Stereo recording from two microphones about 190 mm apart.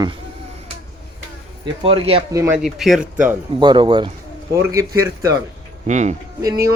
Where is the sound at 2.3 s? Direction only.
15° right (ahead or behind).